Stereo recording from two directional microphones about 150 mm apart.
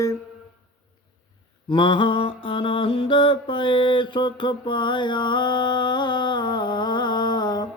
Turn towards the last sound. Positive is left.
turn(degrees=25)  # may be behind; listen again after turning